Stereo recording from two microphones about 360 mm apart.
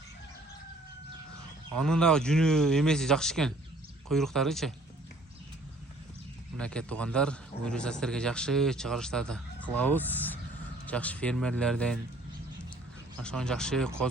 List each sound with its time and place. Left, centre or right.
1.7 s a man's voice: centre
6.6 s a man's voice: centre
13.2 s a man's voice: centre